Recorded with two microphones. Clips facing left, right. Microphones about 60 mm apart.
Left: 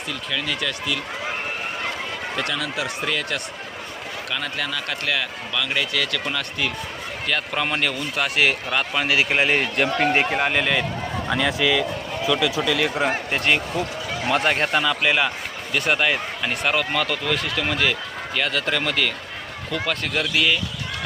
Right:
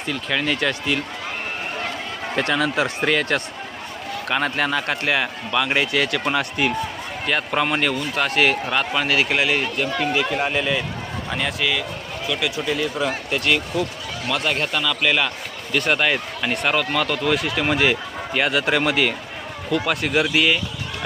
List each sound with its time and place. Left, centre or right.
0.1 s speech: right
2.3 s a man's voice: right
7.3 s speech: centre
9.0 s speech: centre
9.6 s speech: left
12.6 s speech: left
13.1 s speech: left
15.0 s speech: centre
15.7 s speech: centre